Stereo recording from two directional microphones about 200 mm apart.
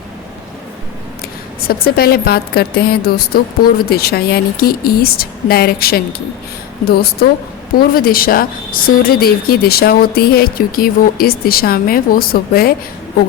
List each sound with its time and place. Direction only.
1.6 s a woman's voice: 50° left (ahead or behind)